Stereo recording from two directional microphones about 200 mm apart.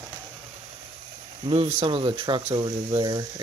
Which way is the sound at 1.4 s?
30° right (ahead or behind).